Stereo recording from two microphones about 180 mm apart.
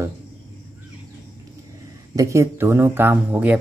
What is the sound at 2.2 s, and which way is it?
Speech, 15° right (ahead or behind).